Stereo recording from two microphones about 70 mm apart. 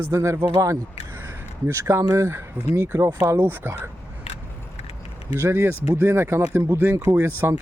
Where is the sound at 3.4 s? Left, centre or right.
Right.